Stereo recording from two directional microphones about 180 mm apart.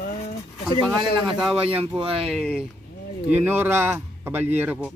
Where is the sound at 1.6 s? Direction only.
30° right (ahead or behind).